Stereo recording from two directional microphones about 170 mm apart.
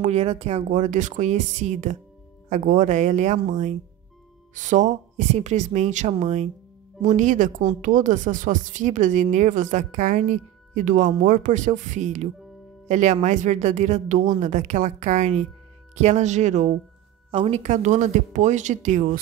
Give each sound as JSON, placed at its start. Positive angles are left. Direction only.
{"t": 0.0, "sound": "speech", "side_deg": -40}